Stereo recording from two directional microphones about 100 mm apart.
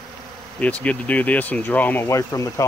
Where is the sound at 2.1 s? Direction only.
35° left (ahead or behind).